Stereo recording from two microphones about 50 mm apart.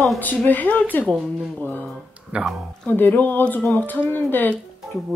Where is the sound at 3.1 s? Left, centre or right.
Left.